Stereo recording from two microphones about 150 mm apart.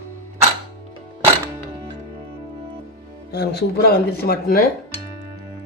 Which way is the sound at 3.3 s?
90° left.